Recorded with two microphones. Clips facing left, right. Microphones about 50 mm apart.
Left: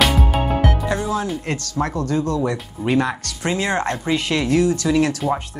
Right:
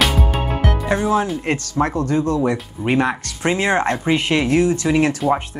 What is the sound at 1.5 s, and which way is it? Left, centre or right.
Speech, right.